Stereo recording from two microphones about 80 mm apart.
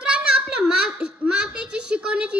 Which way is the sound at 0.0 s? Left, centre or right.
Centre.